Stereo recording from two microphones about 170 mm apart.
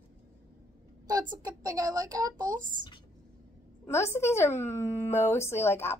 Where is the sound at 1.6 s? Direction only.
20° right (ahead or behind).